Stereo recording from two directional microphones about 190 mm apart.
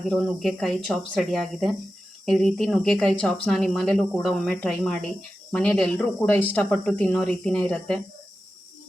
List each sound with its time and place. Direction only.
0.1 s speech: centre (ahead or behind)